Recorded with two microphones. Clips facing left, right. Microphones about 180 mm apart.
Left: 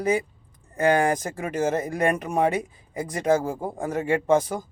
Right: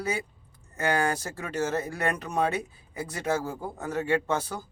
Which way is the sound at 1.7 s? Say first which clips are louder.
Left 5 dB; 15° left (ahead or behind).